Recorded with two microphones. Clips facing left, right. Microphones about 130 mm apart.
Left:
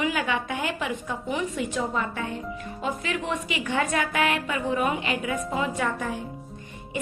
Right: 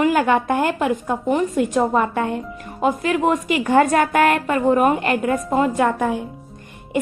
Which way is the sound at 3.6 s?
50° right (ahead or behind).